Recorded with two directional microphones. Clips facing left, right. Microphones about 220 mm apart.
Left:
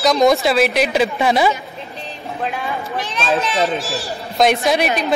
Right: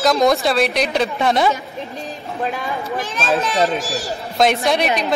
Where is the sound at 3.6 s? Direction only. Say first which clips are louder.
Right 1 dB; 15° right (ahead or behind).